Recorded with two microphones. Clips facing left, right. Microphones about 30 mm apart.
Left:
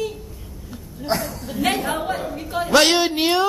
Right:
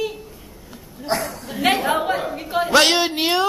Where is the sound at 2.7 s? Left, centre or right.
Centre.